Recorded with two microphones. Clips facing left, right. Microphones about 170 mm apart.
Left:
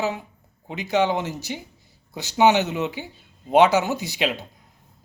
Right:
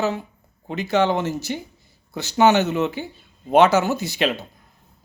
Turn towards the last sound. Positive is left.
turn(degrees=15)  # may be behind; listen again after turning